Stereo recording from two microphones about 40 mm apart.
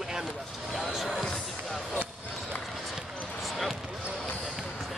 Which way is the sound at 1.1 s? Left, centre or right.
Centre.